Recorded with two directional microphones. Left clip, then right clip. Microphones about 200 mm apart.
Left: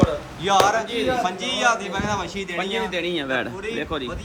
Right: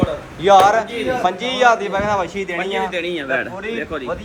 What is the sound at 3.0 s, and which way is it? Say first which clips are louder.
Speech: right 3 dB; 40° left (ahead or behind).